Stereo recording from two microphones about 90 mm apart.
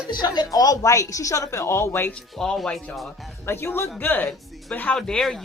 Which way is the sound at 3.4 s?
25° left (ahead or behind).